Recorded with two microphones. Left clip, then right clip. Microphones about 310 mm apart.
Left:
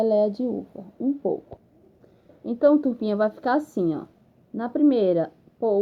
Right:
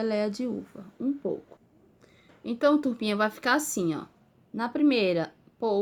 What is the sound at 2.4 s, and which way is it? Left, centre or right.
A woman's voice, right.